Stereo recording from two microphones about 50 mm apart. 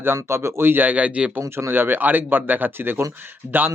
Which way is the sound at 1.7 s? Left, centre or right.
Right.